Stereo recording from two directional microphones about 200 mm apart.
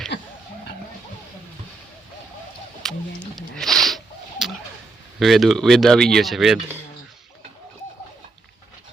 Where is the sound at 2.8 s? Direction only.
Centre (ahead or behind).